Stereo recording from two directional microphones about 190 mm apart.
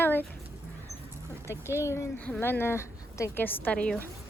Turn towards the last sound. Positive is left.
turn(degrees=5)  # may be behind; listen again after turning